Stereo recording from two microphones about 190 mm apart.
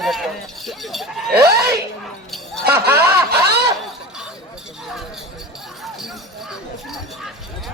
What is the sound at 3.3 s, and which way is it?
Speech, 60° right (ahead or behind).